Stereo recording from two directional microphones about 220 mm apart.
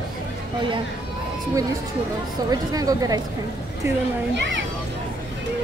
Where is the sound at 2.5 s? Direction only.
15° right (ahead or behind).